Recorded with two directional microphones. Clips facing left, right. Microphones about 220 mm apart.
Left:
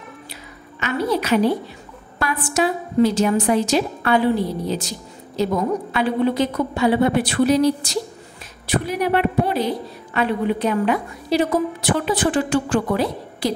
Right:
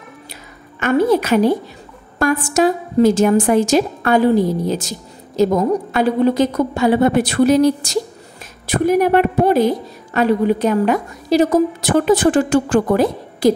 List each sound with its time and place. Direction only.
0.7 s a woman's voice: 50° right (ahead or behind)